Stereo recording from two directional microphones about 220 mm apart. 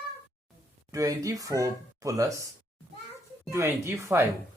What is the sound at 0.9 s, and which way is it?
Speech, 15° right (ahead or behind).